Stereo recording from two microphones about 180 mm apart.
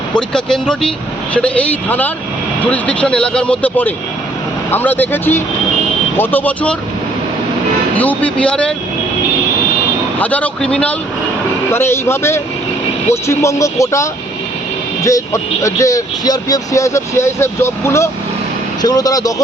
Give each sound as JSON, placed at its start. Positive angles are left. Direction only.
{"t": 0.2, "sound": "speech", "side_deg": 5}
{"t": 7.9, "sound": "speech", "side_deg": 10}
{"t": 10.2, "sound": "speech", "side_deg": 10}